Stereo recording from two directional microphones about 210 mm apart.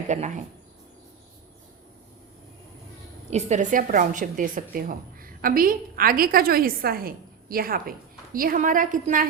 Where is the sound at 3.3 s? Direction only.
35° right (ahead or behind).